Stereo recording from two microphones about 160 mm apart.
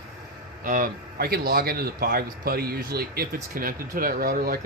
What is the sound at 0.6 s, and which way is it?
Speech, 60° right (ahead or behind).